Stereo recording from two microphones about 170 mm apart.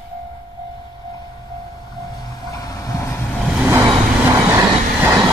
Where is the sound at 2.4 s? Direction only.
20° left (ahead or behind).